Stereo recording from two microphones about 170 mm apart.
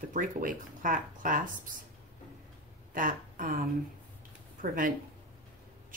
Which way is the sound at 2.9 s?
50° right (ahead or behind).